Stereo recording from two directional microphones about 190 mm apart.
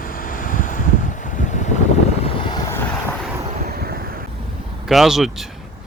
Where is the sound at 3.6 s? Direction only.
55° right (ahead or behind).